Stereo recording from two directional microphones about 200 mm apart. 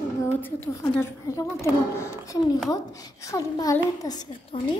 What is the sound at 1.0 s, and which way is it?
A child's voice, 15° left (ahead or behind).